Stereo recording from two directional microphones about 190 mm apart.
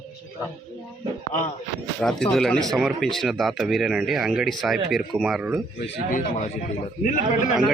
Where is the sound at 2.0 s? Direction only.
Centre (ahead or behind).